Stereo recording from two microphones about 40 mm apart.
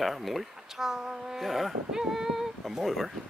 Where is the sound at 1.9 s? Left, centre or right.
Centre.